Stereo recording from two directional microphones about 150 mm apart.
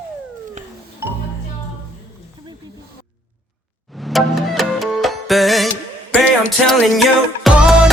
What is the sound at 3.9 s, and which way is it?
Music, centre (ahead or behind).